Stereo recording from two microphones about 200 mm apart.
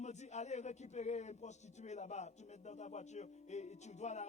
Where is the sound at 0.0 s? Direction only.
35° left (ahead or behind).